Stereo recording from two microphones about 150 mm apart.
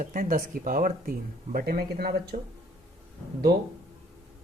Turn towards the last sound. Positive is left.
turn(degrees=-90)